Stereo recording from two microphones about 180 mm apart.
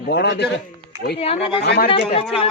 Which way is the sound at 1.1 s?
35° left (ahead or behind).